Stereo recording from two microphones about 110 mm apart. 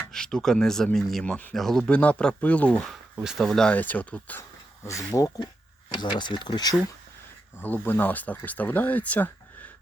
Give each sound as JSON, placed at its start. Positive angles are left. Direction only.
{"t": 0.1, "sound": "speech", "side_deg": 5}
{"t": 3.2, "sound": "speech", "side_deg": -5}
{"t": 6.0, "sound": "speech", "side_deg": 45}
{"t": 7.6, "sound": "speech", "side_deg": 15}